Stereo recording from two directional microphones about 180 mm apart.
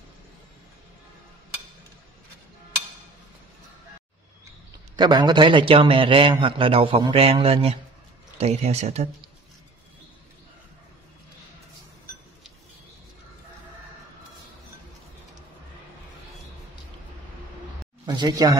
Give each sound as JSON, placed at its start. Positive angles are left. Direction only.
{"t": 4.9, "sound": "a man's voice", "side_deg": -25}
{"t": 18.0, "sound": "speech", "side_deg": -25}